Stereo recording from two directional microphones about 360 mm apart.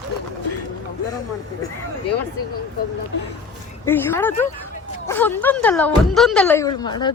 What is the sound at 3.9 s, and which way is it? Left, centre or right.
A woman's voice, centre.